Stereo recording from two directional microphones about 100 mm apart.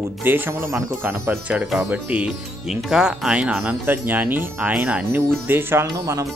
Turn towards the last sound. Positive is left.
turn(degrees=-35)  # may be behind; listen again after turning